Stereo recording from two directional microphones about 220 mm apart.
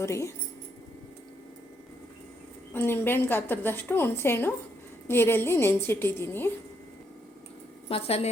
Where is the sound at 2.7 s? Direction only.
10° left (ahead or behind).